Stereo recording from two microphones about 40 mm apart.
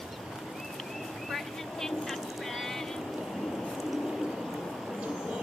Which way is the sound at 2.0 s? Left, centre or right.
Centre.